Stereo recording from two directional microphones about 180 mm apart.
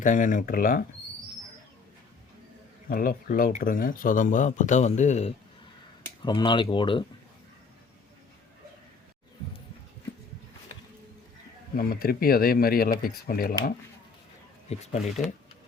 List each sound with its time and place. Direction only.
0.0 s speech: 45° left (ahead or behind)
2.9 s speech: 55° left (ahead or behind)
6.2 s speech: 25° left (ahead or behind)
11.8 s speech: 55° left (ahead or behind)
14.7 s speech: 35° left (ahead or behind)